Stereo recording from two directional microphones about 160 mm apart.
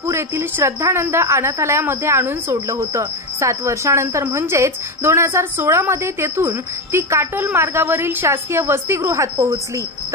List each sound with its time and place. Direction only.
0.0 s a woman's voice: 15° right (ahead or behind)